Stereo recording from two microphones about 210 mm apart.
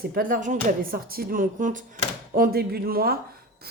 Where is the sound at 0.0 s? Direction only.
45° right (ahead or behind).